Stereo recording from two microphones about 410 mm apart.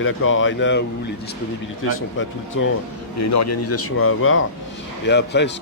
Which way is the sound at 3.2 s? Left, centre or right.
Left.